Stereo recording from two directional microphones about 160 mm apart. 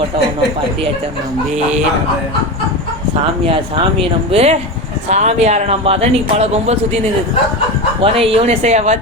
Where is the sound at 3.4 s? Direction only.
35° right (ahead or behind).